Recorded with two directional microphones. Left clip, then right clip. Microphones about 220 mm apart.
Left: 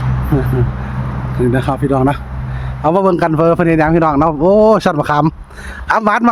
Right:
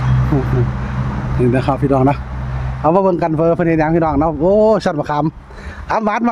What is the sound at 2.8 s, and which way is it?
A man's voice, 20° left (ahead or behind).